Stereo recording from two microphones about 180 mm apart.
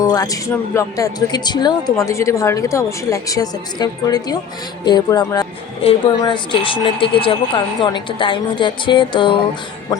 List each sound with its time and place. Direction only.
0.0 s speech: 20° left (ahead or behind)